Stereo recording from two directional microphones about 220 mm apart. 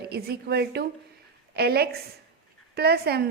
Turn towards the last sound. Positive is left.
turn(degrees=-45)  # may be behind; listen again after turning